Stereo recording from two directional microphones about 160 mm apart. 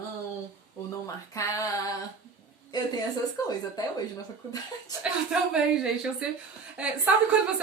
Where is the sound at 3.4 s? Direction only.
25° left (ahead or behind).